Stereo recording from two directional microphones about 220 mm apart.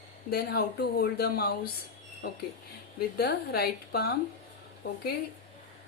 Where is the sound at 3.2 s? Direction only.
45° left (ahead or behind).